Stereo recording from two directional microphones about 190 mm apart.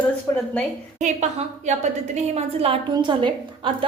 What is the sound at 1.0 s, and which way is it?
A woman's voice, 40° right (ahead or behind).